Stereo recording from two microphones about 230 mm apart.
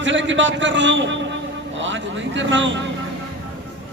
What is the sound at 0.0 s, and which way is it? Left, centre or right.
A man's voice, right.